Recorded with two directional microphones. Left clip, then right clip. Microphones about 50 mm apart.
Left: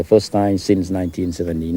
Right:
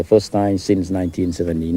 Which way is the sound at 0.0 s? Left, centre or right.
Left.